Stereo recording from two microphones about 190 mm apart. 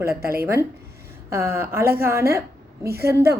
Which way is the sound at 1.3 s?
15° right (ahead or behind).